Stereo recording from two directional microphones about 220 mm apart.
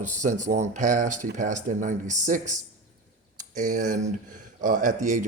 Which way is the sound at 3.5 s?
35° right (ahead or behind).